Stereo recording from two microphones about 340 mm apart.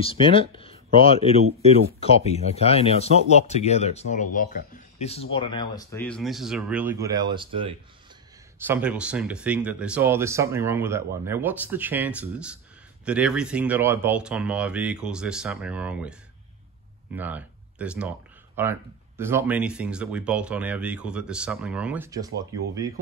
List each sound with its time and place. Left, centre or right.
0.0 s speech: centre